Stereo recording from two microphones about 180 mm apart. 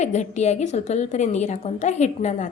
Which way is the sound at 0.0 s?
40° left (ahead or behind).